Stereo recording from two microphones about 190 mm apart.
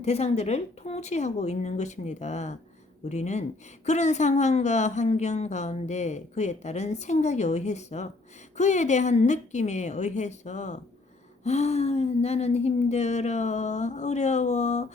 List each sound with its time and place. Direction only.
0.0 s a woman's voice: 35° left (ahead or behind)